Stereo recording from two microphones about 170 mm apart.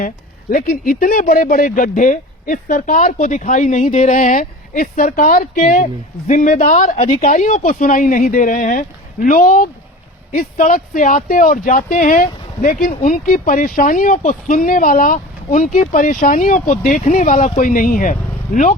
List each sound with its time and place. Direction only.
0.5 s speech: 55° left (ahead or behind)